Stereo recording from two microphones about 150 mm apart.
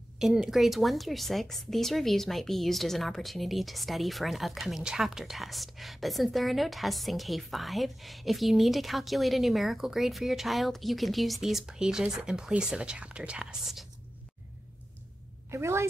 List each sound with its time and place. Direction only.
0.2 s a woman's voice: 5° right (ahead or behind)
15.5 s a woman's voice: 15° right (ahead or behind)